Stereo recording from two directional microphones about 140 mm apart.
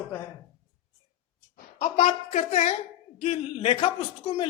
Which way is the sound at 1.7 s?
50° left (ahead or behind).